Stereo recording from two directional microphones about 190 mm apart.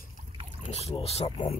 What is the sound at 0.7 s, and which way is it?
Speech, 30° left (ahead or behind).